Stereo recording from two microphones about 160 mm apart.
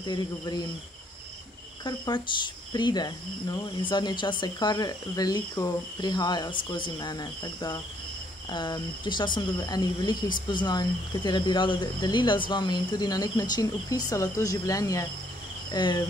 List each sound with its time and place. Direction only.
0.0 s speech: 25° left (ahead or behind)
1.9 s speech: 30° left (ahead or behind)